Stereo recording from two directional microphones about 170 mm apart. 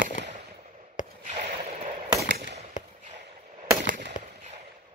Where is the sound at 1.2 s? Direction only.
40° right (ahead or behind).